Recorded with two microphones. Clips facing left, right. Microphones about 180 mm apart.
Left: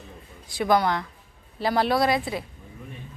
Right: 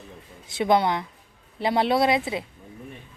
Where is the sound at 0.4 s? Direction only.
25° right (ahead or behind).